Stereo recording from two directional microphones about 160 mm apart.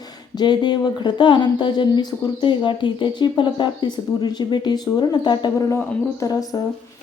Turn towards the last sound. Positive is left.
turn(degrees=20)  # may be behind; listen again after turning